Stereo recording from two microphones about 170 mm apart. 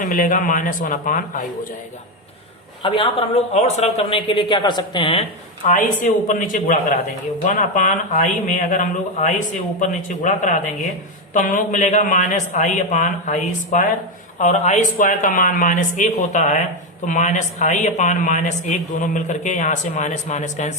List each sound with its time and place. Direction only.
0.0 s a man's voice: 55° left (ahead or behind)
2.8 s speech: 30° left (ahead or behind)
5.6 s a man's voice: 50° left (ahead or behind)